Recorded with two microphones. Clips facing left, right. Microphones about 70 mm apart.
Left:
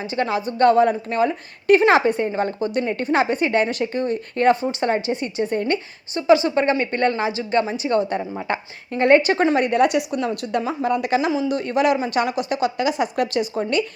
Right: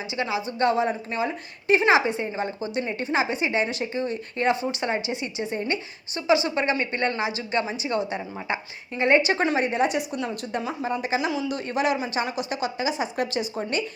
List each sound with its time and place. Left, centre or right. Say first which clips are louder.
0.1 s a woman's voice: left 5 dB; left
8.2 s speech: left 6 dB; centre
8.4 s a woman's voice: left 4 dB; left
9.6 s a woman's voice: left 5 dB; left
11.3 s a woman's voice: left 6 dB; left